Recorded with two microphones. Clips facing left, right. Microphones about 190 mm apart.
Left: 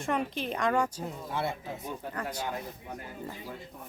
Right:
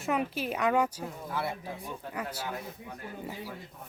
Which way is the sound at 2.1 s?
10° right (ahead or behind).